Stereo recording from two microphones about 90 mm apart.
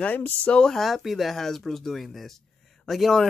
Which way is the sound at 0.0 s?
20° left (ahead or behind).